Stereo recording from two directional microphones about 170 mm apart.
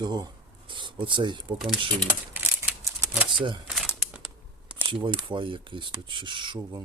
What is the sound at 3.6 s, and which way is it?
Crumpling, 5° right (ahead or behind).